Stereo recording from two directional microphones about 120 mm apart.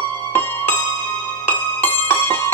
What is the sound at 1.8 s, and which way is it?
Music, 15° left (ahead or behind).